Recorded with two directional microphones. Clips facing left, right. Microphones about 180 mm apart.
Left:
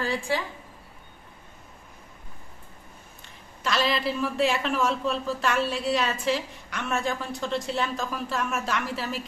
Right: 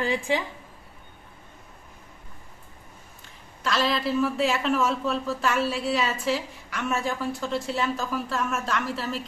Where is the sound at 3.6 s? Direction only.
Centre (ahead or behind).